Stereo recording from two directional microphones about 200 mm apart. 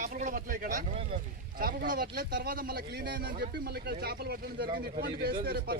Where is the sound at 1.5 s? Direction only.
45° right (ahead or behind).